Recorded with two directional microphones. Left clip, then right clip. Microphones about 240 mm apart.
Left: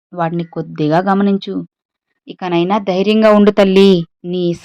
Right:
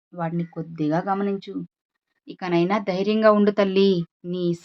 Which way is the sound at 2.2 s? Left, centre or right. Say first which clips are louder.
Left 7 dB; left.